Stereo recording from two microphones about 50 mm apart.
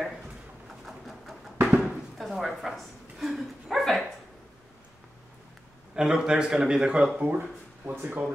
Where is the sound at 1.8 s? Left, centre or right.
Centre.